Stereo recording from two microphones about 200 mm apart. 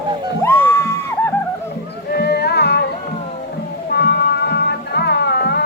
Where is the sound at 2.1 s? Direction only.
55° left (ahead or behind).